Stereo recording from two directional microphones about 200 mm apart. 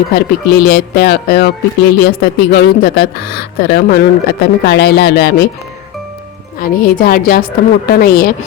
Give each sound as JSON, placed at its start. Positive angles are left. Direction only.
{"t": 0.1, "sound": "speech", "side_deg": 50}
{"t": 6.6, "sound": "speech", "side_deg": 45}